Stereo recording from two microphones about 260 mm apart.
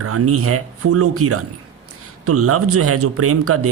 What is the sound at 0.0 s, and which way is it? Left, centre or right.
A man's voice, right.